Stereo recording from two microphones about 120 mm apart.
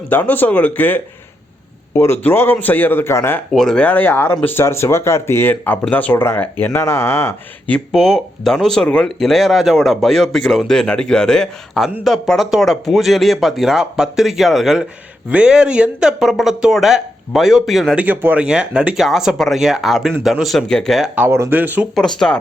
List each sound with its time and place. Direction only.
0.1 s a man's voice: 15° left (ahead or behind)
3.5 s a man's voice: 5° left (ahead or behind); by 7.3 s 20° left (ahead or behind)
7.7 s speech: centre (ahead or behind)
21.2 s speech: 25° right (ahead or behind)
21.9 s speech: 5° left (ahead or behind)